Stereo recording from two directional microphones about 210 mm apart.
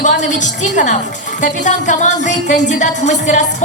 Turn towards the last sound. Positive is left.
turn(degrees=35)  # may be behind; listen again after turning